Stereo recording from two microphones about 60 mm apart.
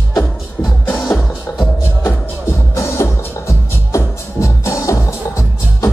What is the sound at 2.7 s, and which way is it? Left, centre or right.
Music, left.